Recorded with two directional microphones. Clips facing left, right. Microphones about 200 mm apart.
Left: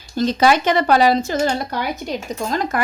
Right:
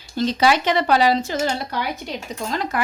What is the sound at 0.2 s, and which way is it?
Speech, 45° left (ahead or behind).